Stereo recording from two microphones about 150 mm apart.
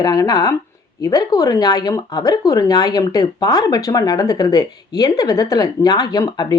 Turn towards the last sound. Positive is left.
turn(degrees=25)  # may be behind; listen again after turning